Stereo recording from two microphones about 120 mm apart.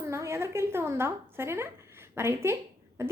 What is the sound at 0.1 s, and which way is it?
A woman's voice, 20° right (ahead or behind).